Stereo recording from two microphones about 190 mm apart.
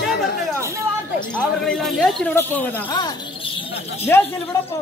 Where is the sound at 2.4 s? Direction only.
10° left (ahead or behind).